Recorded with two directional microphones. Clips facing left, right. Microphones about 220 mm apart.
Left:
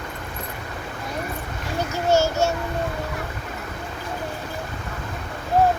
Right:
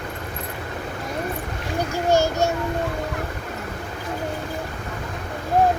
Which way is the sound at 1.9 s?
15° right (ahead or behind).